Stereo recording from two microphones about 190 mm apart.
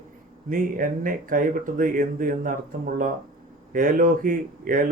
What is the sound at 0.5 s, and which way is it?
Speech, 45° right (ahead or behind).